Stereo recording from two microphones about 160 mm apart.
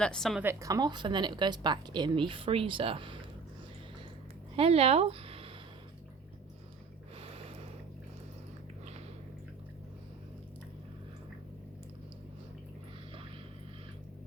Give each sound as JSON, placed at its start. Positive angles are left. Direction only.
{"t": 0.0, "sound": "a woman's voice", "side_deg": 5}
{"t": 0.4, "sound": "speech", "side_deg": -20}
{"t": 4.5, "sound": "speech", "side_deg": -40}
{"t": 7.2, "sound": "a sound", "side_deg": -35}